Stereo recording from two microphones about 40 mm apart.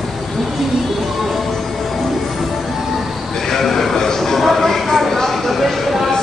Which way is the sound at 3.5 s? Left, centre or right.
Centre.